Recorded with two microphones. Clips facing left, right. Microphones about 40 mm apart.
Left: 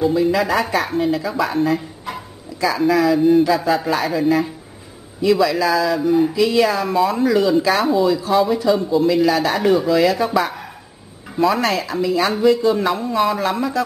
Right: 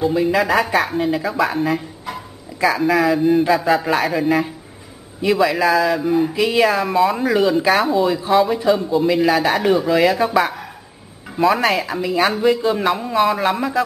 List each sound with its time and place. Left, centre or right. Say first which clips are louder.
0.0 s a man's voice: even; centre
2.1 s a sound: even; centre
2.8 s a man's voice: left 3 dB; centre
3.4 s a man's voice: right 1 dB; centre
5.2 s a man's voice: even; centre
5.9 s a sound: left 2 dB; centre
6.3 s a man's voice: even; centre
8.1 s a man's voice: even; centre